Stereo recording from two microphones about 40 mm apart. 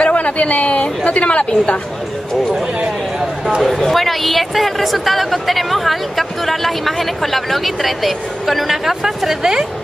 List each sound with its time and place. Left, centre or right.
0.0 s speech: left
3.6 s speech: centre